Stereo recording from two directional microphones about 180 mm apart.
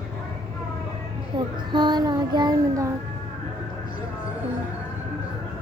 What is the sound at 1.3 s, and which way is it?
Child singing, 25° right (ahead or behind).